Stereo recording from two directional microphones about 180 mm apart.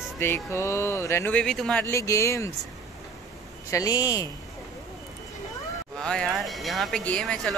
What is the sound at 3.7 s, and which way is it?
Speech, 20° left (ahead or behind).